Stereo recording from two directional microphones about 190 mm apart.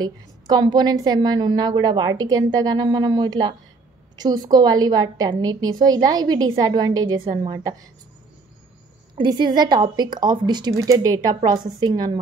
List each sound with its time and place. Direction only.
0.0 s a woman's voice: 20° right (ahead or behind)
9.1 s a woman's voice: 25° right (ahead or behind)